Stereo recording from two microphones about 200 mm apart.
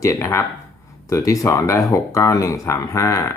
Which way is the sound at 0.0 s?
15° left (ahead or behind).